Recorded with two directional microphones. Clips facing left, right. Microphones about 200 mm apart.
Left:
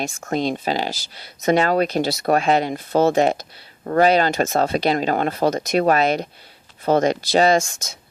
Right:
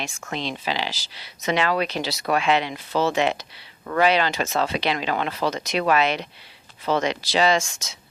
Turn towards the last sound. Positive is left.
turn(degrees=55)  # may be behind; listen again after turning